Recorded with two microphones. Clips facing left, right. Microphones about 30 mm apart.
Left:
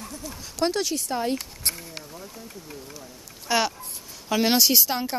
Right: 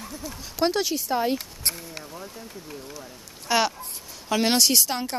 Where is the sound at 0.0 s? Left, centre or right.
Centre.